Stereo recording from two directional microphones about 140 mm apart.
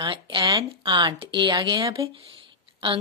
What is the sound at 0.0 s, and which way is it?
A woman's voice, 35° right (ahead or behind).